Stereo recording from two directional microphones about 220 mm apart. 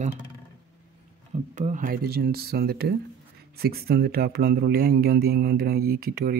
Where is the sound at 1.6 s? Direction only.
35° right (ahead or behind).